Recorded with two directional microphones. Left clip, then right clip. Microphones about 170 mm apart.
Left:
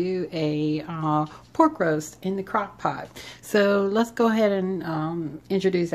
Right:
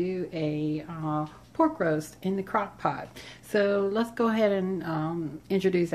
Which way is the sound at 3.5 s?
35° left (ahead or behind).